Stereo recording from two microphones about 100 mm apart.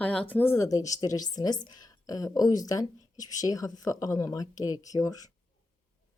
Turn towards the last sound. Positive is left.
turn(degrees=35)  # may be behind; listen again after turning